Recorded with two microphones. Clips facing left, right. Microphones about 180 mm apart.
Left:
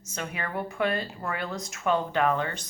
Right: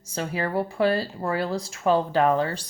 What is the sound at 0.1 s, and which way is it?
Speech, 30° right (ahead or behind).